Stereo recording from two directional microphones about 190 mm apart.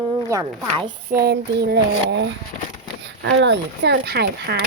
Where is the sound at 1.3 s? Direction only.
60° right (ahead or behind).